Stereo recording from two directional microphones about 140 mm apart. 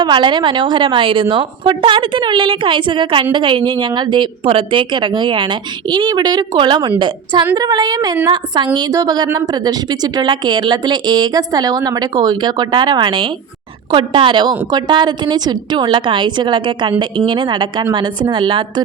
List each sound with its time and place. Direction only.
0.0 s a woman's voice: 35° right (ahead or behind)